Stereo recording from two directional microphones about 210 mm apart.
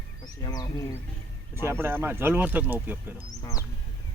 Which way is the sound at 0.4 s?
15° left (ahead or behind).